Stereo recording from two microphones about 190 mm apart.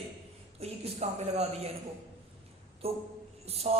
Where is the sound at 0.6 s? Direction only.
35° right (ahead or behind).